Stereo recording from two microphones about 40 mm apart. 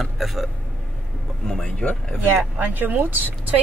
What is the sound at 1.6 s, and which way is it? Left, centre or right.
Speech, left.